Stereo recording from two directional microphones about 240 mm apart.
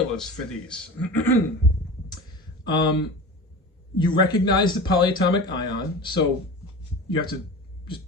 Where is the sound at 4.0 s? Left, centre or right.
Centre.